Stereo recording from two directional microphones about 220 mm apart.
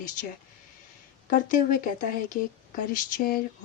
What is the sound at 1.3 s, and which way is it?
Speech, 35° left (ahead or behind).